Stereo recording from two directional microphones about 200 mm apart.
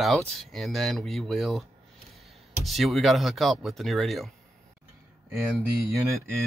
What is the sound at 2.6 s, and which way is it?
Speech, centre (ahead or behind).